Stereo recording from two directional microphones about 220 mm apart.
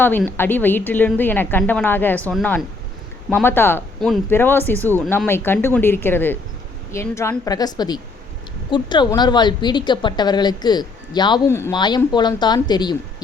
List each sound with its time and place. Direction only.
0.0 s a woman's voice: 10° left (ahead or behind)